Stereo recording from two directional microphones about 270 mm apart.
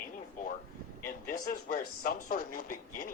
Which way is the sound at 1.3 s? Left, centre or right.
Left.